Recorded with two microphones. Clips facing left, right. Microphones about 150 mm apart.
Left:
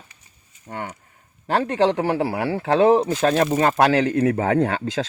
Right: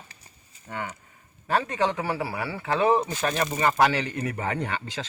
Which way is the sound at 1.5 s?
70° left (ahead or behind).